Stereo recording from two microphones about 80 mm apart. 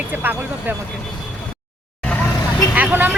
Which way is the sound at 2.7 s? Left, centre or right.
Right.